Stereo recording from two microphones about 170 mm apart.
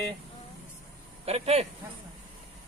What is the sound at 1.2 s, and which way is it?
Speech, 35° right (ahead or behind).